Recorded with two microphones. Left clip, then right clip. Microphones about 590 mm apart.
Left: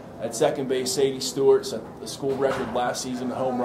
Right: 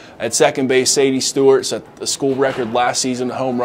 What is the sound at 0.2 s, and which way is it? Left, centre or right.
Speech, right.